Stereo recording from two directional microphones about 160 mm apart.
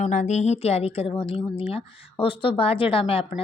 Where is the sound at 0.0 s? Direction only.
50° left (ahead or behind).